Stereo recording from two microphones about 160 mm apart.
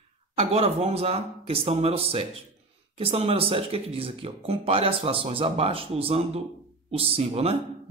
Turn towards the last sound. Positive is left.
turn(degrees=-40)  # may be behind; listen again after turning